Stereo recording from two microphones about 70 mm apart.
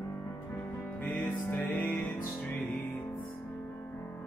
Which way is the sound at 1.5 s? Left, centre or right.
Left.